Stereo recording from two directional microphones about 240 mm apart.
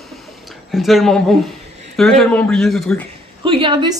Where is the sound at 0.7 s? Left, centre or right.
Centre.